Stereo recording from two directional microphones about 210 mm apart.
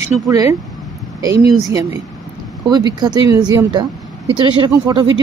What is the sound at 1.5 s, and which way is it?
Speech, 15° right (ahead or behind).